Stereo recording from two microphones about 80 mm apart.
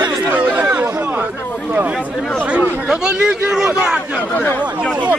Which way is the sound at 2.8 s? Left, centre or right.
Centre.